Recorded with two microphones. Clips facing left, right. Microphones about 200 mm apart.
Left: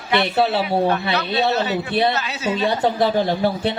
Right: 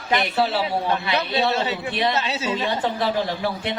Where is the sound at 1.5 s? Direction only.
25° right (ahead or behind).